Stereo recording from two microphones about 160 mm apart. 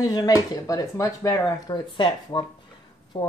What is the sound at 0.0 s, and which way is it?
Speech, 20° left (ahead or behind).